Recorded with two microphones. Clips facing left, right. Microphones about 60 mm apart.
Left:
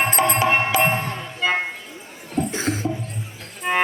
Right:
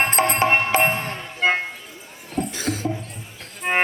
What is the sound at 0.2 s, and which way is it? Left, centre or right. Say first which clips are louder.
Music: even; right.